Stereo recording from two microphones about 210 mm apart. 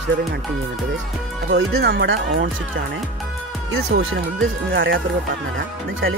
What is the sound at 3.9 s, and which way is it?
Speech, 50° right (ahead or behind).